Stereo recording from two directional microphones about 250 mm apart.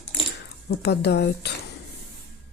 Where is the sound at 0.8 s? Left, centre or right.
Left.